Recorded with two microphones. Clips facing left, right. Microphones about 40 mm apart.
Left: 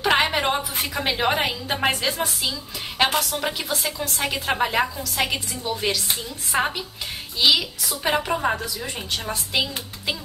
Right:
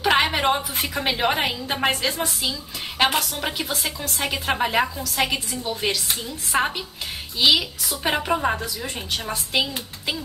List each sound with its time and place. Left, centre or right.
0.0 s a woman's voice: centre